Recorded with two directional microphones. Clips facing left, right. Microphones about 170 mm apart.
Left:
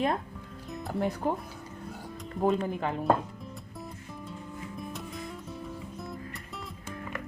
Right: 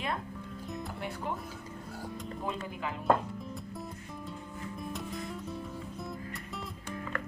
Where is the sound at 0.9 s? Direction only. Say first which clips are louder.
Left 14 dB; 40° left (ahead or behind).